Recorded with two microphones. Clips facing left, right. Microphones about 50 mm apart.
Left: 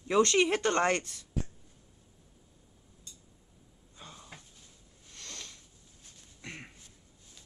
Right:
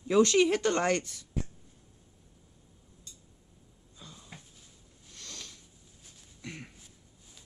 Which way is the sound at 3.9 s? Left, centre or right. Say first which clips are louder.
Left 2 dB; left.